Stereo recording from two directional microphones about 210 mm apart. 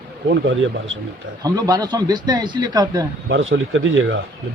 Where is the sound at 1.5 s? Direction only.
20° right (ahead or behind).